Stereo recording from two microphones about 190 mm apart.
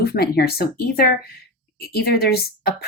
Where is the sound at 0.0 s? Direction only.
55° left (ahead or behind).